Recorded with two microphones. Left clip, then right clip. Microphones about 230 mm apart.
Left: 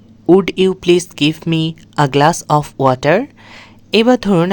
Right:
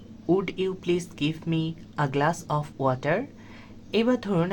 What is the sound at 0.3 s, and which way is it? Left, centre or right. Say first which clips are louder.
Speech: left 14 dB; left.